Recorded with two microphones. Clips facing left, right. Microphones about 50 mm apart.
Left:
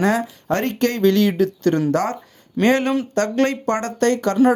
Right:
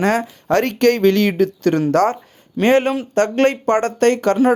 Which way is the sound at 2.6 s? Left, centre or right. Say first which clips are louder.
Right 2 dB; right.